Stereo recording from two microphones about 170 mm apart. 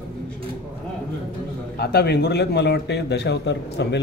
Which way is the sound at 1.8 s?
70° left (ahead or behind).